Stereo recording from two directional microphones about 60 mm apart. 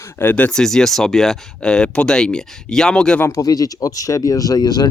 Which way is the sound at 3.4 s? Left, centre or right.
Left.